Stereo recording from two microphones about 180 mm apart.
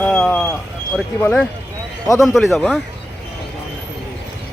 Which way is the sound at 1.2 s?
5° left (ahead or behind).